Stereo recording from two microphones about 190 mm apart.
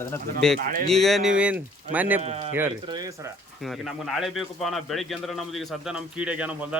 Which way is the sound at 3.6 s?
Centre (ahead or behind).